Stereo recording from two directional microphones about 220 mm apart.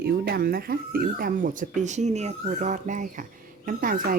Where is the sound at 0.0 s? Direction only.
45° right (ahead or behind).